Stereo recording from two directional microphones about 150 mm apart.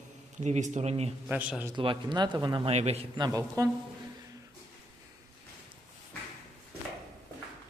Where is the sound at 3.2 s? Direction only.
25° right (ahead or behind).